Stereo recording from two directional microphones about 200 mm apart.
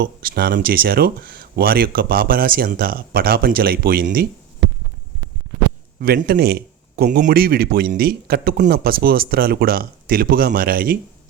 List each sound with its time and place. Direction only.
0.0 s speech: 50° right (ahead or behind)
6.0 s speech: 50° right (ahead or behind)